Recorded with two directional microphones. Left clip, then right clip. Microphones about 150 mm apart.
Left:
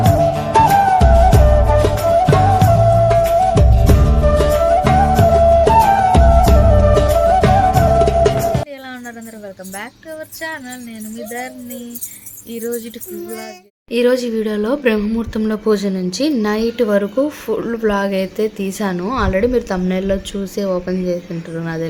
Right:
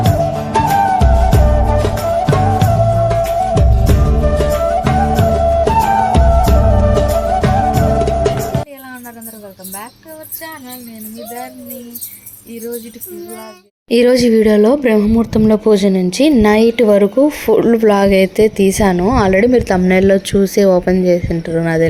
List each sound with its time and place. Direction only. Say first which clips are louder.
0.0 s music: left 1 dB; centre (ahead or behind)
0.3 s music: left 2 dB; 20° right (ahead or behind)
0.5 s music: left 1 dB; centre (ahead or behind)
13.9 s speech: right 5 dB; 40° right (ahead or behind)
14.9 s speech: right 7 dB; 20° right (ahead or behind); by 21.8 s 35° right (ahead or behind)